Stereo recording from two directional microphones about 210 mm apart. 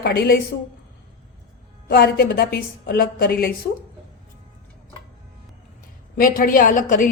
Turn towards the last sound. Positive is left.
turn(degrees=40)  # may be behind; listen again after turning